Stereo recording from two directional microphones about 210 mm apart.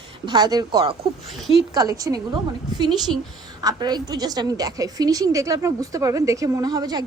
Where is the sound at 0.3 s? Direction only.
20° right (ahead or behind).